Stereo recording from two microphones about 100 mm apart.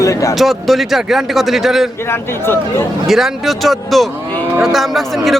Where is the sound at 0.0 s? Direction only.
30° left (ahead or behind).